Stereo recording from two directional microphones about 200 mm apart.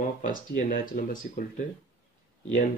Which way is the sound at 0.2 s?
45° left (ahead or behind).